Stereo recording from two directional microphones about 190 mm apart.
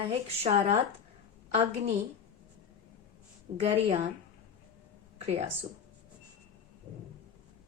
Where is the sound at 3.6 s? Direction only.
35° right (ahead or behind).